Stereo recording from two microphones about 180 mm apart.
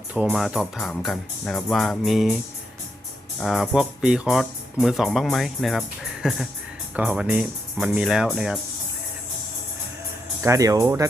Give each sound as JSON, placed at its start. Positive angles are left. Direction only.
{"t": 0.1, "sound": "speech", "side_deg": -10}
{"t": 3.4, "sound": "speech", "side_deg": 0}
{"t": 10.4, "sound": "speech", "side_deg": -15}